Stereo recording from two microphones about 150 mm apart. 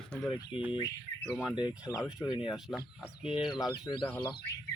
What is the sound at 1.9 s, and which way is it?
Speech, 5° left (ahead or behind).